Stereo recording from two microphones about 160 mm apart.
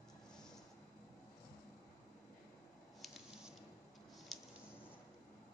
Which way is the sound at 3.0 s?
5° right (ahead or behind).